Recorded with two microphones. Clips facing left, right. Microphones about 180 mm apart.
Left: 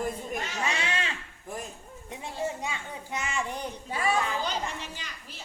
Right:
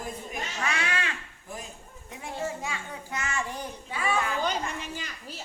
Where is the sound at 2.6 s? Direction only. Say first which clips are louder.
Even; 20° left (ahead or behind).